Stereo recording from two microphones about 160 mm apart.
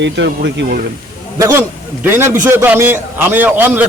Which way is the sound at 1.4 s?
20° right (ahead or behind).